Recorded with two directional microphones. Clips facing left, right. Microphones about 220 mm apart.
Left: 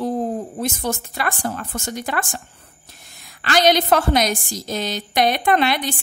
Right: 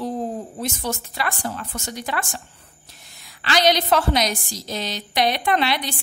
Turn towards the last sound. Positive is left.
turn(degrees=50)  # may be behind; listen again after turning